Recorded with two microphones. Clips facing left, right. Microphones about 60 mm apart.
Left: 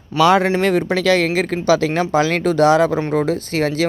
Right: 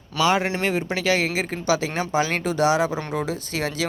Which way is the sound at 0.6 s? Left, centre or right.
Left.